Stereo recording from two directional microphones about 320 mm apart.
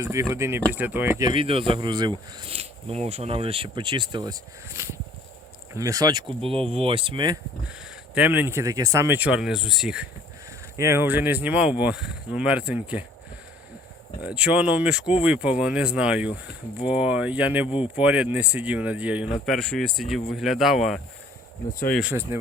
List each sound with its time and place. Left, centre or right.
0.0 s speech: centre
1.4 s speech: centre
14.2 s speech: centre
17.7 s speech: centre
18.0 s speech: centre